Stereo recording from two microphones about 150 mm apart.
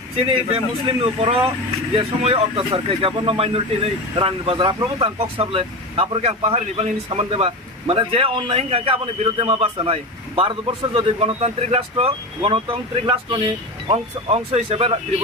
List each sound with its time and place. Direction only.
0.3 s speech: 40° right (ahead or behind)